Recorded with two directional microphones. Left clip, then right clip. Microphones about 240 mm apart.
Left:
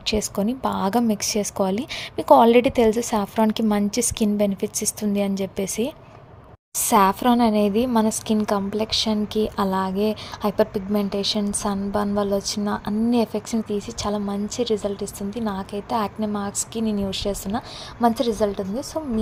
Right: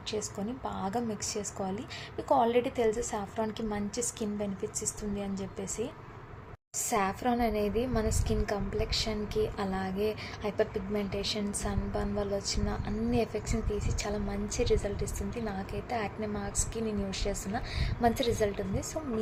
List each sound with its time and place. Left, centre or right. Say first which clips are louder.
0.0 s a woman's voice: left 12 dB; left